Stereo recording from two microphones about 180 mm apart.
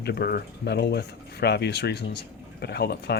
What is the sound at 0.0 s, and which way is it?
Speech, 60° left (ahead or behind).